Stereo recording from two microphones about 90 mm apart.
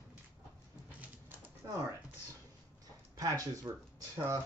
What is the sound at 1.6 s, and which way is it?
Computer keyboard, 40° right (ahead or behind).